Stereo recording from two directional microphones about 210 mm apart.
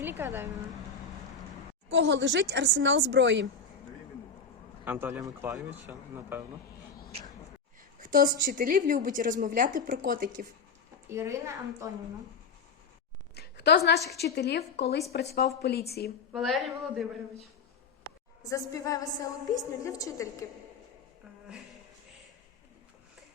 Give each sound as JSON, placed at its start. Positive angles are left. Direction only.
{"t": 0.0, "sound": "speech", "side_deg": -10}
{"t": 1.9, "sound": "speech", "side_deg": -60}
{"t": 4.9, "sound": "speech", "side_deg": -10}
{"t": 8.0, "sound": "a woman's voice", "side_deg": -40}
{"t": 11.1, "sound": "speech", "side_deg": -15}
{"t": 13.3, "sound": "a sound", "side_deg": 50}
{"t": 14.2, "sound": "a woman's voice", "side_deg": 50}
{"t": 16.3, "sound": "a man's voice", "side_deg": 0}
{"t": 18.4, "sound": "a woman's voice", "side_deg": 15}